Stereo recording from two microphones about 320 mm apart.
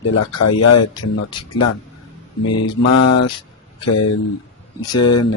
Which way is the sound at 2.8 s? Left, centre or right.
Left.